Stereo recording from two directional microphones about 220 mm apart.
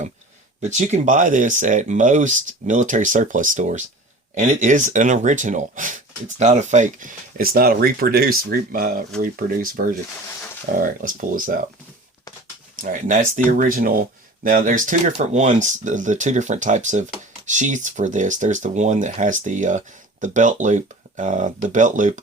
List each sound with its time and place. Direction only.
0.6 s speech: 30° right (ahead or behind)
12.8 s speech: 35° right (ahead or behind)